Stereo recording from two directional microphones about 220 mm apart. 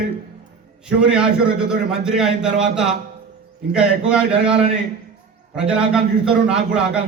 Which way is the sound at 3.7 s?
5° right (ahead or behind).